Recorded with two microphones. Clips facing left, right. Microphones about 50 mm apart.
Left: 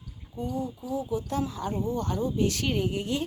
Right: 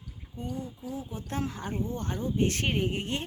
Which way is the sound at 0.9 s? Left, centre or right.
Right.